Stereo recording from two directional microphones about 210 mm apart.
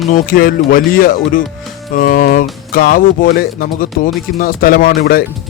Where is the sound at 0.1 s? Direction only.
40° left (ahead or behind).